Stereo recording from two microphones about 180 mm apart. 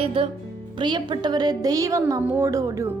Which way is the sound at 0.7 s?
25° right (ahead or behind).